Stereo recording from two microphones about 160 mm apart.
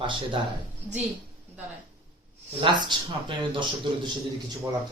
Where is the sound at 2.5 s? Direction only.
30° right (ahead or behind).